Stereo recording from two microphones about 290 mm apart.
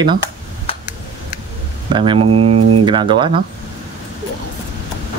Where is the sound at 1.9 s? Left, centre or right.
Centre.